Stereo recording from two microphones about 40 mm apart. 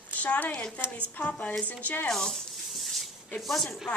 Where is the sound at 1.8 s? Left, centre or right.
Left.